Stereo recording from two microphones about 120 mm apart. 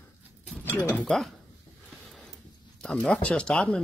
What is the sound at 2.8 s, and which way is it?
Speech, 5° left (ahead or behind).